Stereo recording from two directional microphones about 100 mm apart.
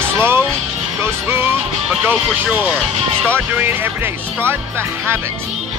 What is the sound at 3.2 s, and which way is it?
Speech, 20° right (ahead or behind).